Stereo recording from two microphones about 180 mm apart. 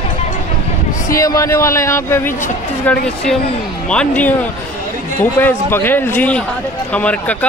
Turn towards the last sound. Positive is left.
turn(degrees=5)  # may be behind; listen again after turning